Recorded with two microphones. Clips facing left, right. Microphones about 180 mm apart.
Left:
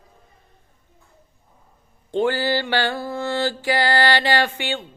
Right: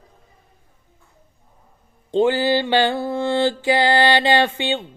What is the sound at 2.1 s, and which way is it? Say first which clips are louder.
Music: right 4 dB; 20° right (ahead or behind).